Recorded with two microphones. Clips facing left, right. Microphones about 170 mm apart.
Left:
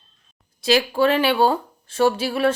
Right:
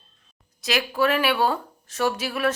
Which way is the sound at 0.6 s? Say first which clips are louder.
Left 5 dB; 30° left (ahead or behind).